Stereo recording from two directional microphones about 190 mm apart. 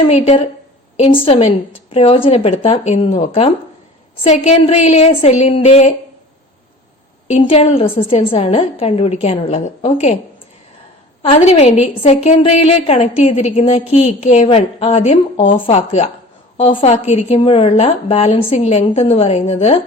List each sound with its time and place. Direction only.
0.1 s a woman's voice: 35° left (ahead or behind)
7.3 s a woman's voice: 30° left (ahead or behind)
11.2 s a woman's voice: 35° left (ahead or behind)